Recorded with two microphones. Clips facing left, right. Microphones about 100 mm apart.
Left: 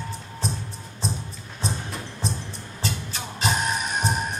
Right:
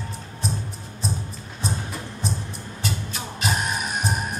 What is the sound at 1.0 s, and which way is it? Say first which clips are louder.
Music: right 1 dB; centre (ahead or behind).